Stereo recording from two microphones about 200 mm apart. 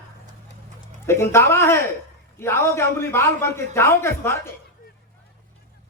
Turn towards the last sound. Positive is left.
turn(degrees=15)  # may be behind; listen again after turning